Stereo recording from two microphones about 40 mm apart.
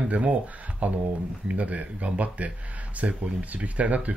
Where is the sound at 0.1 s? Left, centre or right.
Right.